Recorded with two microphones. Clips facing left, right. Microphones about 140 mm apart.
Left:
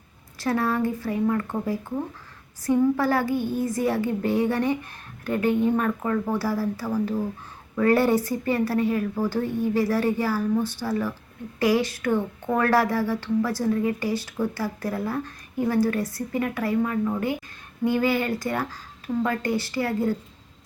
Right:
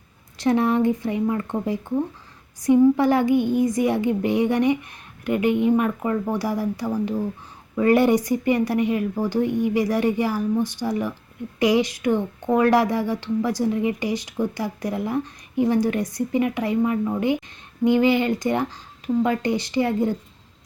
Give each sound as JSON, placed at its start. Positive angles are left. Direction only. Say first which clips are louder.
{"t": 0.3, "sound": "speech", "louder": "right 5 dB", "side_deg": -20}